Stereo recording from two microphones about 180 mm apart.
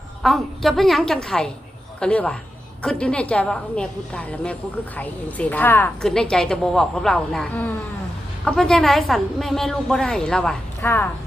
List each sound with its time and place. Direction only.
0.2 s a woman's voice: centre (ahead or behind)